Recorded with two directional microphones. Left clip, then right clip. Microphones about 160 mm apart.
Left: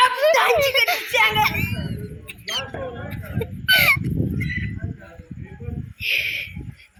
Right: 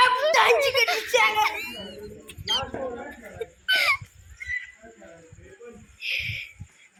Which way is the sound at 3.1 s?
20° left (ahead or behind).